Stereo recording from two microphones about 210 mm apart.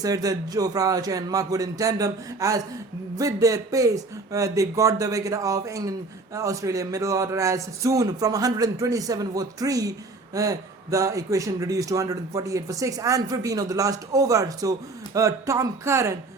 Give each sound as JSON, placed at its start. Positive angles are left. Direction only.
{"t": 0.0, "sound": "a man's voice", "side_deg": -15}